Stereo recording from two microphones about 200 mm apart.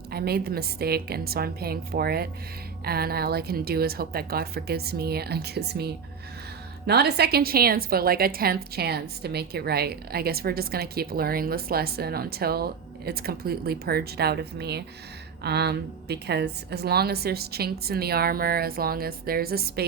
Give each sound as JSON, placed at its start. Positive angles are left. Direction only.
{"t": 0.1, "sound": "a woman's voice", "side_deg": -50}